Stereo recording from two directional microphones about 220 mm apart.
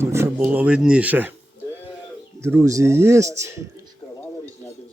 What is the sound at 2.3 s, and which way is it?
A man's voice, 10° right (ahead or behind).